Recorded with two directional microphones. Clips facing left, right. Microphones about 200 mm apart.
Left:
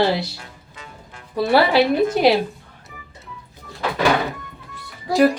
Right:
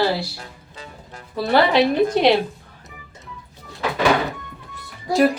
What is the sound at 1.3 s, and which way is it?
A woman's voice, 10° left (ahead or behind).